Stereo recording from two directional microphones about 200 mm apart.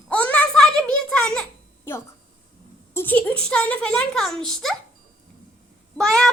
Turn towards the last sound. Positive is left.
turn(degrees=5)  # may be behind; listen again after turning